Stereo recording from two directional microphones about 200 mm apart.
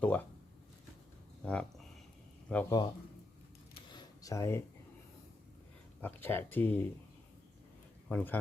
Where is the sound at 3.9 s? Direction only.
20° left (ahead or behind).